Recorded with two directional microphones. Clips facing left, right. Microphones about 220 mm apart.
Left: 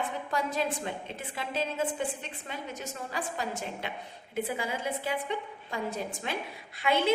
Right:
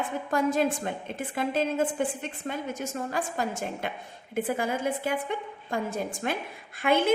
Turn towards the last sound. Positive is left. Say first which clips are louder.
# right 3 dB
turn(degrees=-50)  # may be behind; listen again after turning